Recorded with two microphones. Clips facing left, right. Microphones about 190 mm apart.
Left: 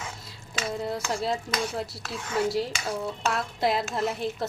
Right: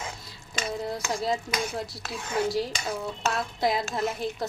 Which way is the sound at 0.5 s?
Centre (ahead or behind).